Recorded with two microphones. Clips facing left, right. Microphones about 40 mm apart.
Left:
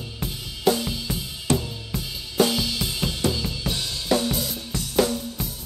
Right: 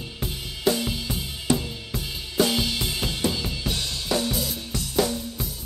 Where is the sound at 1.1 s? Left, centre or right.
Right.